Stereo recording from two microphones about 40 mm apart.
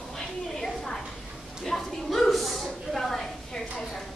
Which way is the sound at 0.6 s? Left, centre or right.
Centre.